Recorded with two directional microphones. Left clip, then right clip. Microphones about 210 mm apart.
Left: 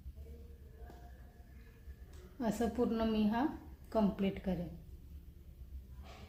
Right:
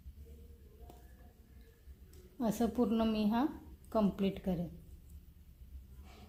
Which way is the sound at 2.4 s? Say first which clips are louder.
Right 1 dB; 30° right (ahead or behind).